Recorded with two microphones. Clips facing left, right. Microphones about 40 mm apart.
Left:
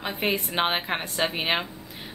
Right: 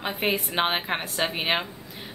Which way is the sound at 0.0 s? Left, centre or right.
Centre.